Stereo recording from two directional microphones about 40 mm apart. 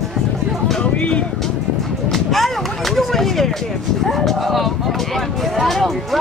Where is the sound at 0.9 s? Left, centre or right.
Left.